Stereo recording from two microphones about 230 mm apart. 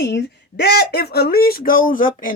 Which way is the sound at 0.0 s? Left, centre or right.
Left.